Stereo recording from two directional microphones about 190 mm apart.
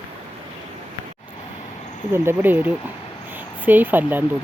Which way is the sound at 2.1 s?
10° right (ahead or behind).